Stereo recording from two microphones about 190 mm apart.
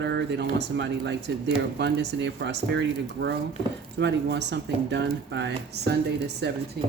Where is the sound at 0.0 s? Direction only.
65° right (ahead or behind).